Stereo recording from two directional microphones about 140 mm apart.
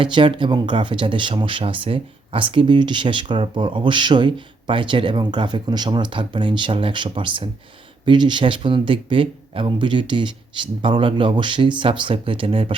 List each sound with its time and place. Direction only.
0.0 s speech: 35° right (ahead or behind)